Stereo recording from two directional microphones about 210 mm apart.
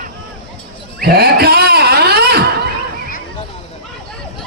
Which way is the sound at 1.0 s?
50° right (ahead or behind).